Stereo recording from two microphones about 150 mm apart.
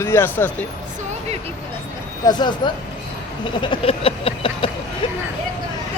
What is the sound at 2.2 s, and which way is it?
Speech, 25° left (ahead or behind).